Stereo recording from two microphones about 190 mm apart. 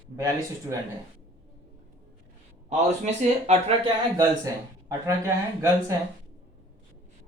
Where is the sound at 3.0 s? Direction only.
35° right (ahead or behind).